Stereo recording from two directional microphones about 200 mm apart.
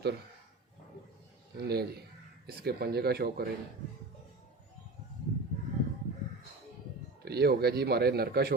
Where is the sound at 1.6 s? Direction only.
50° right (ahead or behind).